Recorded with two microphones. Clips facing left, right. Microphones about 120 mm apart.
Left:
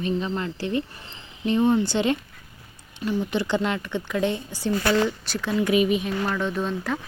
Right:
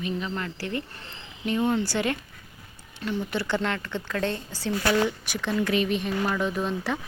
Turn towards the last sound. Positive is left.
turn(degrees=-5)  # may be behind; listen again after turning